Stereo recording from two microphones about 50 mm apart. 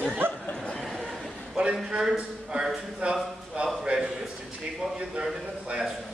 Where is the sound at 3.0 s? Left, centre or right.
Right.